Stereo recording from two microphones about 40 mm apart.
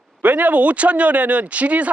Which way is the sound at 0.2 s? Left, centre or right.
Right.